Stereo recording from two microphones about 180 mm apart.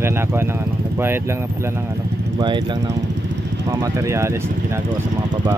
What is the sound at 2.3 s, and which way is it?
Speech, 25° right (ahead or behind).